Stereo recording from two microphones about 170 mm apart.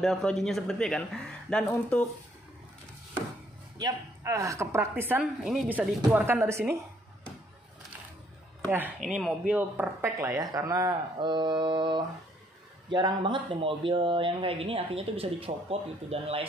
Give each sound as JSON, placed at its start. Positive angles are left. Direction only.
{"t": 0.0, "sound": "speech", "side_deg": 5}
{"t": 3.7, "sound": "a woman's voice", "side_deg": -20}
{"t": 6.1, "sound": "a woman's voice", "side_deg": -10}
{"t": 9.0, "sound": "speech", "side_deg": 0}
{"t": 9.5, "sound": "speech", "side_deg": -10}